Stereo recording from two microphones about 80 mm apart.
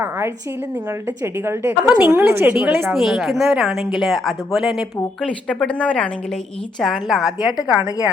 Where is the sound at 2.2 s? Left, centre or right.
Right.